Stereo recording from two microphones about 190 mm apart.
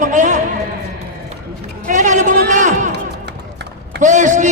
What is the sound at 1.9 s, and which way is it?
Speech, 40° right (ahead or behind).